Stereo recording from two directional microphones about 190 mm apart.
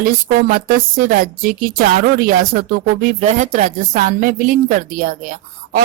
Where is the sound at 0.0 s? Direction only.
50° right (ahead or behind).